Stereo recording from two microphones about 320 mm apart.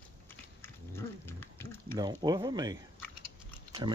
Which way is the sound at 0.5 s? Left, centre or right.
Centre.